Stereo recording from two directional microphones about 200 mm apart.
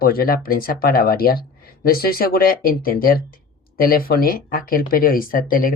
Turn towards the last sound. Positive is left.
turn(degrees=45)  # may be behind; listen again after turning